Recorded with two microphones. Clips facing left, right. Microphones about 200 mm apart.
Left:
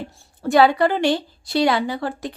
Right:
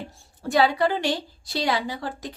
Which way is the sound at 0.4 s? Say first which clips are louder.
Left 5 dB; 70° left (ahead or behind).